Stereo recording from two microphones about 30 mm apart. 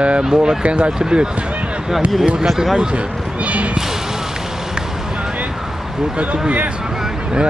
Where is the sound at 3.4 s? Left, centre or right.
Right.